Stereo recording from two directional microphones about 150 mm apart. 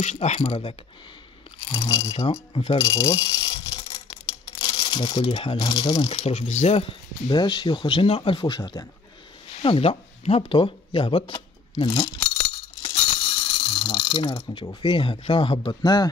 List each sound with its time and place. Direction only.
0.0 s speech: 50° left (ahead or behind); by 12.3 s 30° left (ahead or behind)
13.5 s speech: 35° left (ahead or behind)